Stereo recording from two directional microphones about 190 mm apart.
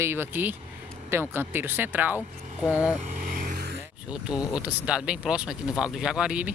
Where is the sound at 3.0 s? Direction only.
40° right (ahead or behind).